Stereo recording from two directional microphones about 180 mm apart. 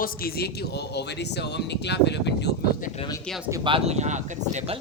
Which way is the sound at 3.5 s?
25° right (ahead or behind).